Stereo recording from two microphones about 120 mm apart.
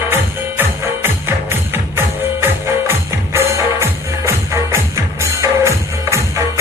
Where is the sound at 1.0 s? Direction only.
20° right (ahead or behind).